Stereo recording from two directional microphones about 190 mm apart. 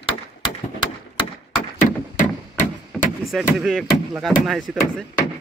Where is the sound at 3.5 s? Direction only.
Centre (ahead or behind).